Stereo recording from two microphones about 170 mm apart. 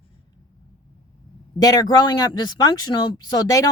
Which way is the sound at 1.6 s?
25° left (ahead or behind).